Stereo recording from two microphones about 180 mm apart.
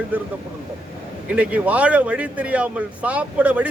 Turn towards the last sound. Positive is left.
turn(degrees=-5)  # may be behind; listen again after turning